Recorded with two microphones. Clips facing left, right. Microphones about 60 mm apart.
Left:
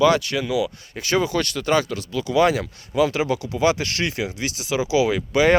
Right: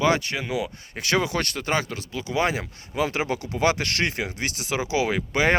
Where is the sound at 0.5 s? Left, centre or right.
Right.